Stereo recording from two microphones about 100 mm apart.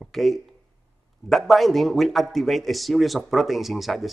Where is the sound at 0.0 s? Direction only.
Centre (ahead or behind).